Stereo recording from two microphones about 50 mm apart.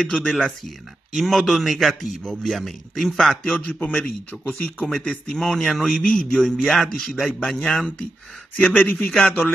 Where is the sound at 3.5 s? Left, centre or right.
Left.